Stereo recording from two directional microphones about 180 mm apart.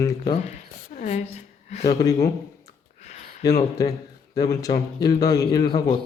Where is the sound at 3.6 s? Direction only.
20° left (ahead or behind).